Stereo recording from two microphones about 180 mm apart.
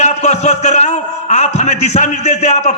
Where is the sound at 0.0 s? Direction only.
40° left (ahead or behind).